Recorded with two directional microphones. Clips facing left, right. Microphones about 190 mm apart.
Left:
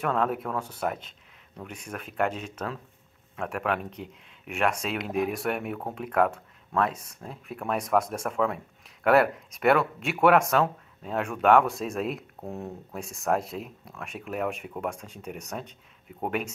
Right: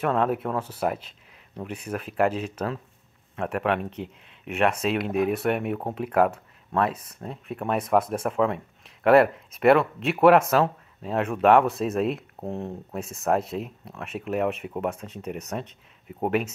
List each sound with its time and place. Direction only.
0.0 s speech: centre (ahead or behind)
8.0 s speech: 30° right (ahead or behind)
8.3 s speech: centre (ahead or behind)